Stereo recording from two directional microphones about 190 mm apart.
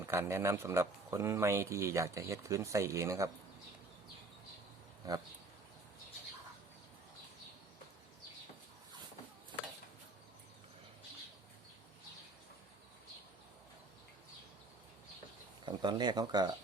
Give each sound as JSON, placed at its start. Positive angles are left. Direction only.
{"t": 0.0, "sound": "speech", "side_deg": -15}
{"t": 5.0, "sound": "speech", "side_deg": -20}
{"t": 15.6, "sound": "speech", "side_deg": -25}